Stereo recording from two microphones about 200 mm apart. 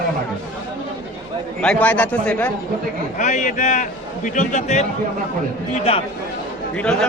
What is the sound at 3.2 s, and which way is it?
A man's voice, 40° left (ahead or behind).